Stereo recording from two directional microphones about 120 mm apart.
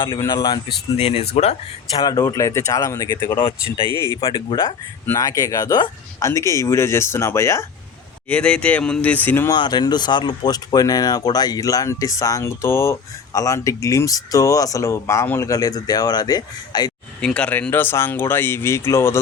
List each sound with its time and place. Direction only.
0.9 s speech: 55° left (ahead or behind)
1.9 s speech: 35° left (ahead or behind)
4.2 s speech: 45° left (ahead or behind)
4.6 s speech: 25° left (ahead or behind)
8.3 s speech: 10° left (ahead or behind)
9.5 s speech: 35° left (ahead or behind)
17.2 s speech: 10° left (ahead or behind)